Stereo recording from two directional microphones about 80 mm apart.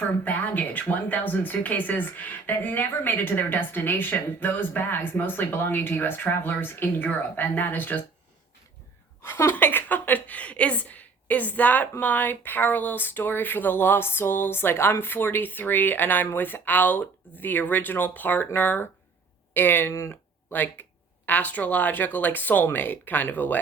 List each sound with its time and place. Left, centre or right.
0.3 s a woman's voice: left
9.2 s a woman's voice: left